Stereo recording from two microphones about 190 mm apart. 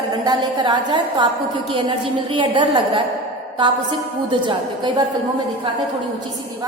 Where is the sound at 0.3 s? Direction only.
25° right (ahead or behind).